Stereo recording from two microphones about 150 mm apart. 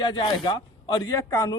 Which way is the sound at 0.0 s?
30° left (ahead or behind).